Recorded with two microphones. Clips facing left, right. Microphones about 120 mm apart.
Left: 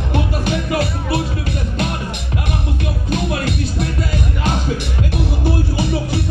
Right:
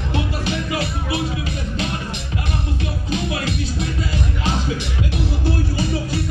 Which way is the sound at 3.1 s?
55° left (ahead or behind).